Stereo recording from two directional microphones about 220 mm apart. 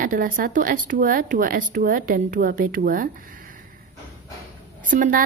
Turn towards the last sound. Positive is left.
turn(degrees=-35)  # may be behind; listen again after turning